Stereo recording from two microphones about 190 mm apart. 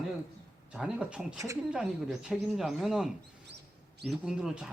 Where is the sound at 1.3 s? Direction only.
15° right (ahead or behind).